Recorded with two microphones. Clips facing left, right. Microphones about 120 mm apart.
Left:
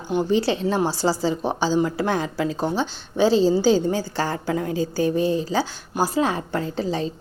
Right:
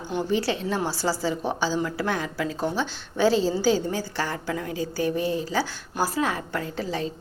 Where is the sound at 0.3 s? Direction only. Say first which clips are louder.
Left 3 dB; 25° left (ahead or behind).